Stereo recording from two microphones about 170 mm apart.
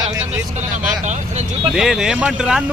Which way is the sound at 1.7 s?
5° right (ahead or behind).